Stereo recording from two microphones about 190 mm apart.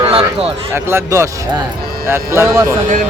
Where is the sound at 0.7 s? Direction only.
15° right (ahead or behind).